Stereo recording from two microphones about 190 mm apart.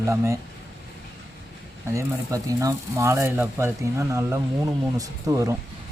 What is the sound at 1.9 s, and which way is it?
Speech, 15° right (ahead or behind).